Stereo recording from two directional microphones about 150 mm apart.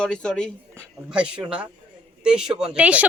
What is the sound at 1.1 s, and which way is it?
Speech, 5° right (ahead or behind).